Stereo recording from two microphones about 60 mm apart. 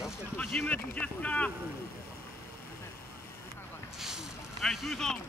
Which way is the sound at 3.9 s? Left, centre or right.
Centre.